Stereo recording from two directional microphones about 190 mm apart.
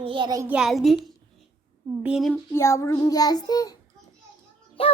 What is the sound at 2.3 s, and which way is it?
Child singing, 15° left (ahead or behind).